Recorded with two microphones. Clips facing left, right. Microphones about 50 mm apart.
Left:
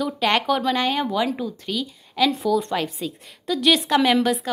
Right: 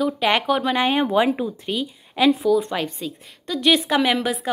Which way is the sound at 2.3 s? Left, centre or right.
Centre.